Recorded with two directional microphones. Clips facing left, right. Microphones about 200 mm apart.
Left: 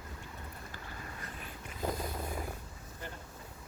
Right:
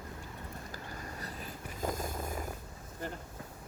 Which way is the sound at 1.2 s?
40° right (ahead or behind).